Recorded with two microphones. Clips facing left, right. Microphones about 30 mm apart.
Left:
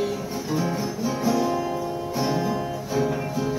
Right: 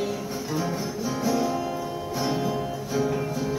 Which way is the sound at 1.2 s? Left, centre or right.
Centre.